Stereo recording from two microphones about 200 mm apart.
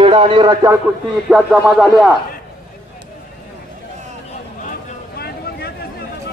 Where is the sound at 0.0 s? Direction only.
25° right (ahead or behind).